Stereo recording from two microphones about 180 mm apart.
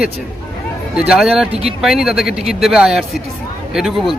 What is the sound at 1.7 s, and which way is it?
A man's voice, 5° right (ahead or behind).